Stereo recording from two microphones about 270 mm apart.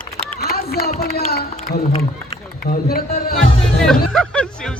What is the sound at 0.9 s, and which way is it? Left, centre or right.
Speech, left.